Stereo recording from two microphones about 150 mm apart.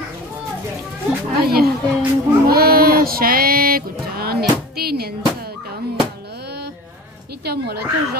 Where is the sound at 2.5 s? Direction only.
90° right.